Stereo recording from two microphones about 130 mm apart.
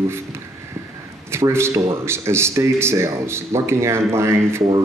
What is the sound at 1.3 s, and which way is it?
A man's voice, 20° right (ahead or behind).